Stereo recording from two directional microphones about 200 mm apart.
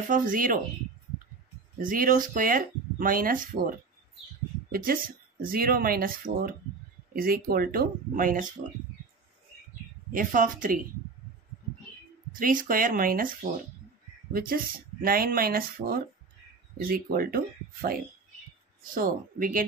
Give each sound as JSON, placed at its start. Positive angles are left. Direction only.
{"t": 0.1, "sound": "speech", "side_deg": -40}
{"t": 1.8, "sound": "speech", "side_deg": -45}
{"t": 10.1, "sound": "speech", "side_deg": -40}
{"t": 12.3, "sound": "speech", "side_deg": -45}
{"t": 18.9, "sound": "speech", "side_deg": -45}